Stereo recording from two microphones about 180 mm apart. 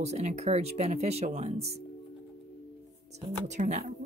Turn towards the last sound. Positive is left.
turn(degrees=-40)  # may be behind; listen again after turning